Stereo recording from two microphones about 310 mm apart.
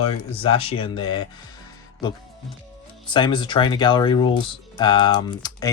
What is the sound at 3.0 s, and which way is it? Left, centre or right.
Speech, centre.